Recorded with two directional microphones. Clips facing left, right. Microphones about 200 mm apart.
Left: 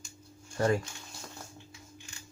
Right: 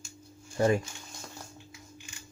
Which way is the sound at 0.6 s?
15° right (ahead or behind).